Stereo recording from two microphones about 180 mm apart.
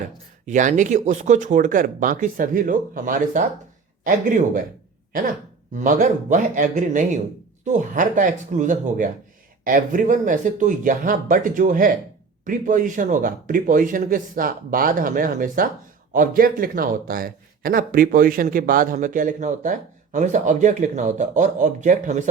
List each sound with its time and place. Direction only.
0.4 s a man's voice: 45° right (ahead or behind)
5.7 s a man's voice: 45° right (ahead or behind)